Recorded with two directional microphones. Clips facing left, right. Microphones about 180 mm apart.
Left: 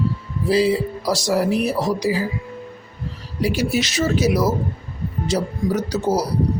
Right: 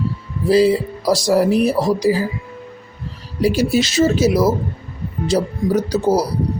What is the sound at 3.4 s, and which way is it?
A man's voice, 35° right (ahead or behind).